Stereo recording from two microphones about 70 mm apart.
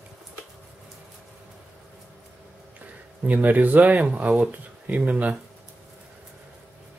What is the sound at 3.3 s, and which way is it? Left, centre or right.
Speech, right.